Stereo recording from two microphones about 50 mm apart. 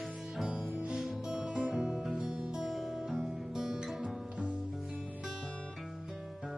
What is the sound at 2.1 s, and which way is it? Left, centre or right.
Music, right.